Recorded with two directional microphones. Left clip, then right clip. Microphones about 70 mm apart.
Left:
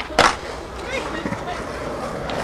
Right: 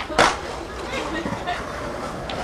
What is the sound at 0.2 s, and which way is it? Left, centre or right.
Skateboard, centre.